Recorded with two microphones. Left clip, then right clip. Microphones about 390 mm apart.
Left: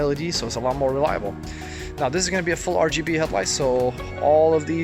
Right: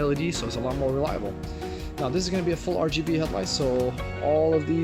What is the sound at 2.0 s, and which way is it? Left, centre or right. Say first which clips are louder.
Speech: left 4 dB; centre.